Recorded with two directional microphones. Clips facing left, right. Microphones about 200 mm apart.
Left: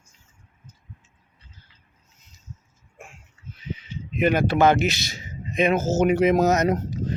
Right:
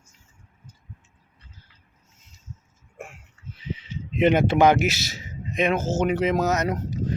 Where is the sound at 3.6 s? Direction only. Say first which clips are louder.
Right 1 dB; 30° right (ahead or behind).